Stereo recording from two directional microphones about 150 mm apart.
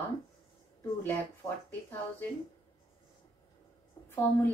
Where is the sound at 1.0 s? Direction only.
15° left (ahead or behind).